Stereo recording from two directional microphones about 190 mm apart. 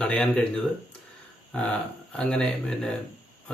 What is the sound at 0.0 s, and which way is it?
Speech, 5° left (ahead or behind).